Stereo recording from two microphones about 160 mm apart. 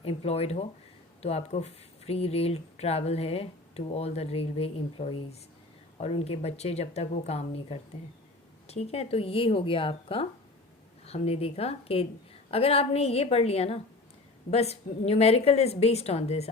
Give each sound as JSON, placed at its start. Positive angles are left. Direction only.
{"t": 0.0, "sound": "speech", "side_deg": 40}